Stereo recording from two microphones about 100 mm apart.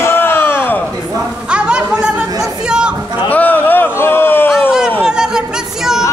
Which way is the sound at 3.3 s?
15° left (ahead or behind).